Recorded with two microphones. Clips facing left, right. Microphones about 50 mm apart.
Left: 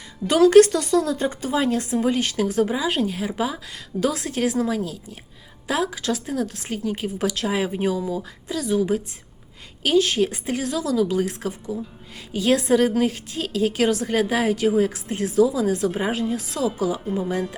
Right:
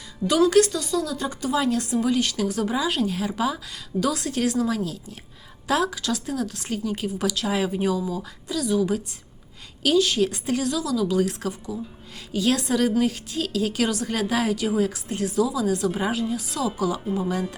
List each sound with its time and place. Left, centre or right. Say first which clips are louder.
0.5 s a woman's voice: left 6 dB; left
16.3 s speech: left 2 dB; left
16.7 s a woman's voice: left 1 dB; left